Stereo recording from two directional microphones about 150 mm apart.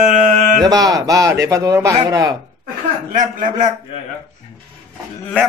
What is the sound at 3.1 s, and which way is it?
Male singing, 65° right (ahead or behind).